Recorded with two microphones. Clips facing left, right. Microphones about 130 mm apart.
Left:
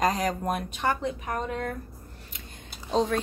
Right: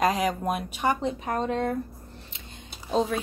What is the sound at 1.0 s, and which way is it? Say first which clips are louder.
Speech: right 3 dB; 25° right (ahead or behind).